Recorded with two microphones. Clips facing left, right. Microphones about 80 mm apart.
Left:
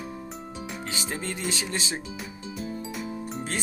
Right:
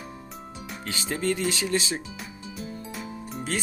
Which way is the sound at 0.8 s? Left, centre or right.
Left.